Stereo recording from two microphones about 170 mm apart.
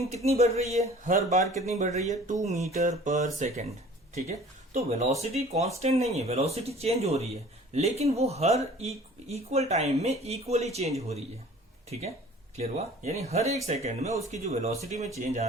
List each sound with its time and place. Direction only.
0.0 s speech: 40° right (ahead or behind)